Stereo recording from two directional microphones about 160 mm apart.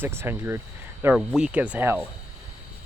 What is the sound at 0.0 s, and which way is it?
Speech, 15° right (ahead or behind).